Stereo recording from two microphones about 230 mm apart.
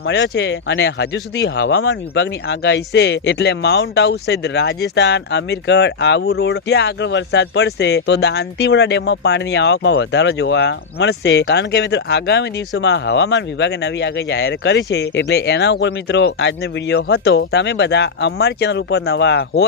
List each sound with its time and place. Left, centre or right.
0.0 s speech: left